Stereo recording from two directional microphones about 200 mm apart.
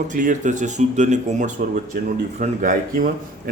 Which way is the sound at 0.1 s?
40° right (ahead or behind).